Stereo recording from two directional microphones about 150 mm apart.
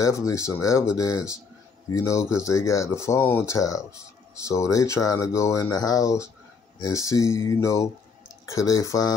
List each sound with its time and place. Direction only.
0.0 s speech: 20° left (ahead or behind)